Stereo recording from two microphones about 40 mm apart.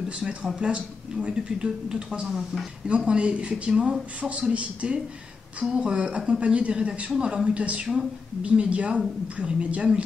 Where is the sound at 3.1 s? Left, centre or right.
Right.